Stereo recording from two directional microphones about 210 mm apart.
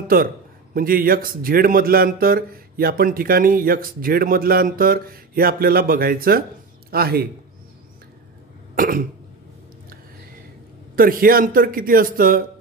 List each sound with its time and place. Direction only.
0.1 s a man's voice: 45° right (ahead or behind)
8.7 s cough: 45° right (ahead or behind)
11.0 s a man's voice: 45° right (ahead or behind)